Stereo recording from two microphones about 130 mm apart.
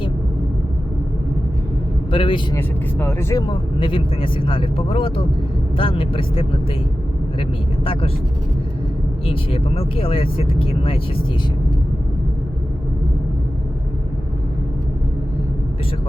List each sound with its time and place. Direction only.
2.0 s speech: 40° left (ahead or behind)
2.6 s speech: 15° left (ahead or behind)
3.5 s speech: 40° left (ahead or behind)
9.2 s speech: 45° left (ahead or behind)